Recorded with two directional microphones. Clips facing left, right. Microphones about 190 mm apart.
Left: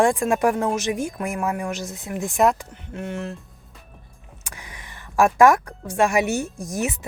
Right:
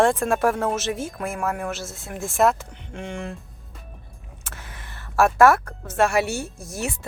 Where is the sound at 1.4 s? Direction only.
5° left (ahead or behind).